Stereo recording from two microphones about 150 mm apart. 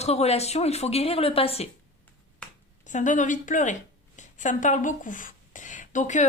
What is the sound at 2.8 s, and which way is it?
A woman's voice, 55° left (ahead or behind).